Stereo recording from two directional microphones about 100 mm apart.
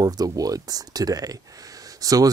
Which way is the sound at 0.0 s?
40° right (ahead or behind).